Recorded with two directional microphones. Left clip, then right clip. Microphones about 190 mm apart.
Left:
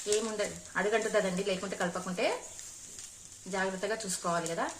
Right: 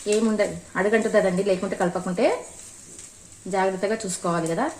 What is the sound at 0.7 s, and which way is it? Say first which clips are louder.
Speech: right 7 dB; 35° right (ahead or behind).